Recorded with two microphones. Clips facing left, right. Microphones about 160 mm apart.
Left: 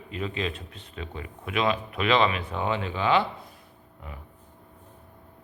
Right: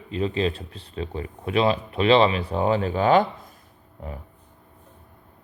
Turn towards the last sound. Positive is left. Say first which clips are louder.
# right 7 dB
turn(degrees=-40)  # may be behind; listen again after turning